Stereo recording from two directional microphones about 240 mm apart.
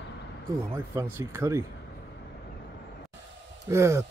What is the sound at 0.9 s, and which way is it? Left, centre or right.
Speech, centre.